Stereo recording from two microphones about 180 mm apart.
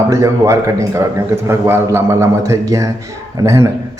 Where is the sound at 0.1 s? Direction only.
15° right (ahead or behind).